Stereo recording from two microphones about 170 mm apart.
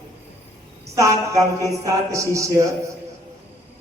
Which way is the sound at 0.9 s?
20° right (ahead or behind).